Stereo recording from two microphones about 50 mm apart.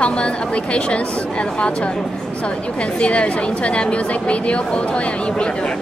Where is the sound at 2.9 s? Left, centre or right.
Left.